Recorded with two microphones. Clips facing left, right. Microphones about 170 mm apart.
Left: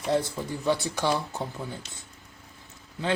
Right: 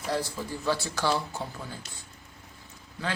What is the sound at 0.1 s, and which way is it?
Speech, 20° left (ahead or behind).